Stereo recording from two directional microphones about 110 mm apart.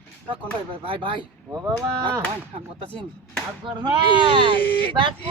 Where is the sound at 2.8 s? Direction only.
55° right (ahead or behind).